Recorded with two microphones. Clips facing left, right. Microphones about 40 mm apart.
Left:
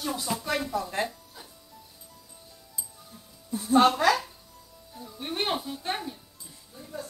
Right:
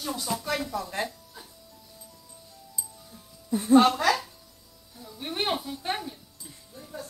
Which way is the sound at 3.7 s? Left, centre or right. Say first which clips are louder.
Right 1 dB; centre.